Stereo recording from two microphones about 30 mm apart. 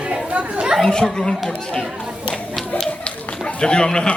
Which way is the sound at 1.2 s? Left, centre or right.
Left.